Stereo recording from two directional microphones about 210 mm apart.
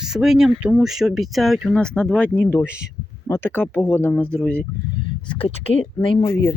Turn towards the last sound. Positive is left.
turn(degrees=20)  # may be behind; listen again after turning